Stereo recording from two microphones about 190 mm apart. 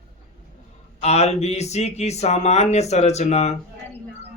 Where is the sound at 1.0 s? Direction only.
35° left (ahead or behind).